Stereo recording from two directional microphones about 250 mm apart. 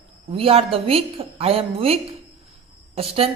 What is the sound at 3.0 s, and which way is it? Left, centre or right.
Speech, right.